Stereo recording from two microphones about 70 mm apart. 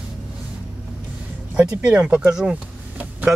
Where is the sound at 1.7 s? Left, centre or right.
Centre.